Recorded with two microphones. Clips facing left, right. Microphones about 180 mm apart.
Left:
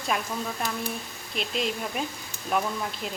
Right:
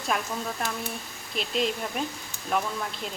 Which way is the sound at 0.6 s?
Centre (ahead or behind).